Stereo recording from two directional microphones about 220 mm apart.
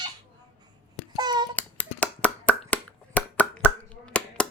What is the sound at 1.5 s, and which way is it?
Finger snapping, 5° left (ahead or behind).